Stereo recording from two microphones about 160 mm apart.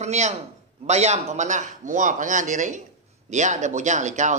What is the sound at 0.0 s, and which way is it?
Speech, 45° right (ahead or behind).